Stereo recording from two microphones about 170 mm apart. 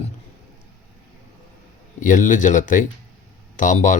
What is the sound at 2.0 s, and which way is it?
Speech, 50° left (ahead or behind).